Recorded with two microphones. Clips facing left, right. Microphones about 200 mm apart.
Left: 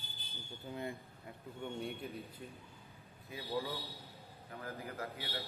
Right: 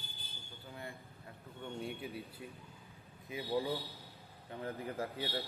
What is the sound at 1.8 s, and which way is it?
Speech, centre (ahead or behind).